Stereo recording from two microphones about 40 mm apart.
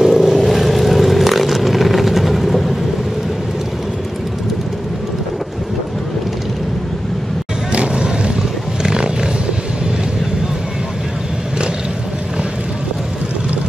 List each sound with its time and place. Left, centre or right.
0.0 s vehicle: centre
7.7 s vehicle: right
8.8 s roaring cats: centre